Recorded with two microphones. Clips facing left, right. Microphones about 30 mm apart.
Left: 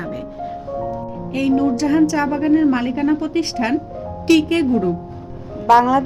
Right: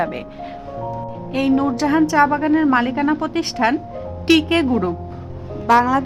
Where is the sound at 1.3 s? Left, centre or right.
Right.